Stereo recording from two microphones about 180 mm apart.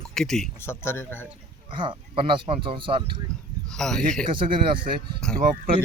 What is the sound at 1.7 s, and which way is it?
Speech, 30° right (ahead or behind).